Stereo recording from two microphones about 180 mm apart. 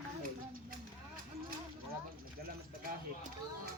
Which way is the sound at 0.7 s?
50° right (ahead or behind).